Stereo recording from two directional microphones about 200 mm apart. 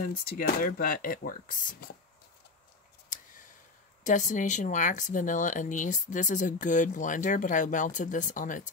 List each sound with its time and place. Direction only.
0.0 s speech: 45° left (ahead or behind)
4.0 s speech: 40° left (ahead or behind)